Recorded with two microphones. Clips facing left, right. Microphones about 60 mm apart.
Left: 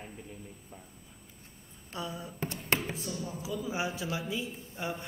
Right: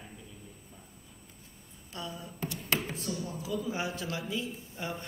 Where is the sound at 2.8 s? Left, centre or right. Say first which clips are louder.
Even; centre.